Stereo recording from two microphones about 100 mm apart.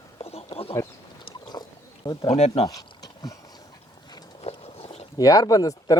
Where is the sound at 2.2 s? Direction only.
90° left.